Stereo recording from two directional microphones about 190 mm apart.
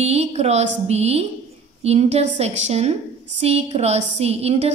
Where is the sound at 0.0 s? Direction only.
35° right (ahead or behind).